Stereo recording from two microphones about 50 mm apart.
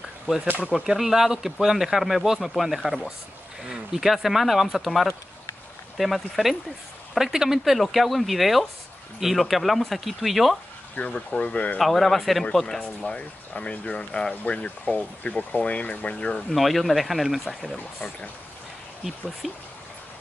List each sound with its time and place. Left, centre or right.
0.9 s speech: centre
11.0 s speech: left
11.8 s speech: centre
13.0 s speech: left
16.5 s speech: centre
19.4 s speech: centre